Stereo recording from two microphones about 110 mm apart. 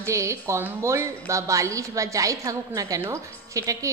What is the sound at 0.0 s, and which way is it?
A woman's voice, 25° right (ahead or behind).